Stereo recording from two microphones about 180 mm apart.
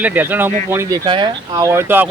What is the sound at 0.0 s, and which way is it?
Speech, 10° right (ahead or behind).